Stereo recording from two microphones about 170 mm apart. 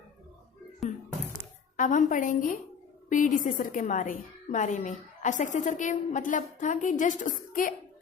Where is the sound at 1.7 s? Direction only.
50° left (ahead or behind).